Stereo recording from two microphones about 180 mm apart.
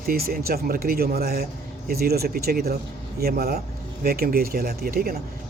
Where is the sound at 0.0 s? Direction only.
55° right (ahead or behind).